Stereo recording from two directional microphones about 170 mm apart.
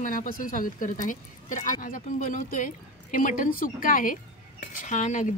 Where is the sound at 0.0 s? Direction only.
50° left (ahead or behind).